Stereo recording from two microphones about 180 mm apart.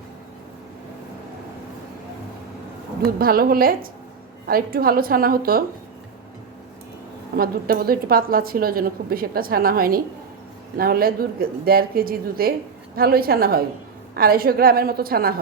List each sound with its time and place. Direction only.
3.2 s a woman's voice: 55° right (ahead or behind)
7.3 s a woman's voice: 55° right (ahead or behind)